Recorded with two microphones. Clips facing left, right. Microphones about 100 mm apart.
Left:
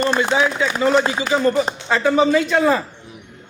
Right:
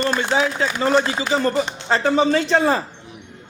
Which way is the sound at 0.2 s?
35° right (ahead or behind).